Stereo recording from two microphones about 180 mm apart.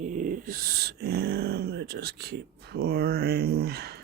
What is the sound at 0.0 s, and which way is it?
Speech, 45° right (ahead or behind).